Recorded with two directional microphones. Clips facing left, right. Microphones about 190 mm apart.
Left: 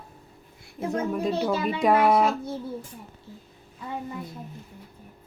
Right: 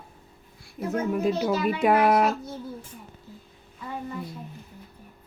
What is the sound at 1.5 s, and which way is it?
Speech, 30° left (ahead or behind).